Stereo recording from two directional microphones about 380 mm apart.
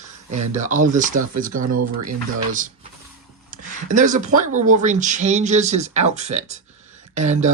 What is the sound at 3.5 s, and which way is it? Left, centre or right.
Speech, centre.